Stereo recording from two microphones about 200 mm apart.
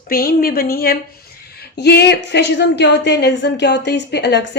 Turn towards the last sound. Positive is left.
turn(degrees=60)  # may be behind; listen again after turning